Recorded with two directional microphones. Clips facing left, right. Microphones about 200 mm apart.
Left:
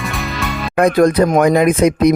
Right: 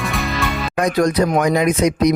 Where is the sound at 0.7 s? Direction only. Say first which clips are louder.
Left 6 dB; 55° left (ahead or behind).